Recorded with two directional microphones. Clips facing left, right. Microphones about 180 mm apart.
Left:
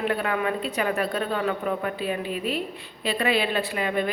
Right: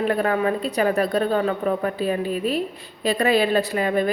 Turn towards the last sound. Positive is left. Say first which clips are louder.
# right 4 dB
turn(degrees=-40)  # may be behind; listen again after turning